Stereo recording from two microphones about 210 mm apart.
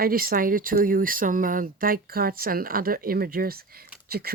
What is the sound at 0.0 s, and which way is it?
Speech, 45° right (ahead or behind).